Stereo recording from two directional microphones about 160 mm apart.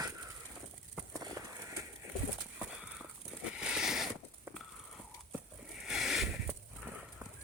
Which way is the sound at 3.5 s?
5° right (ahead or behind).